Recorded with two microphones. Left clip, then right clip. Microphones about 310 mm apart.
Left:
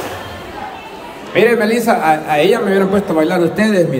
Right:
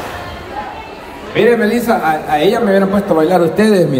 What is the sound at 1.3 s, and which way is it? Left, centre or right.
Speech, centre.